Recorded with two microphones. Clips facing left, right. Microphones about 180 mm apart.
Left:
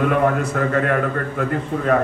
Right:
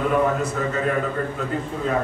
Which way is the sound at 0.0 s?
65° left (ahead or behind).